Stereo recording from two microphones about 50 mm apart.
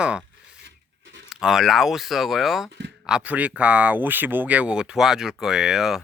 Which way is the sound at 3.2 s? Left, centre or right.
Right.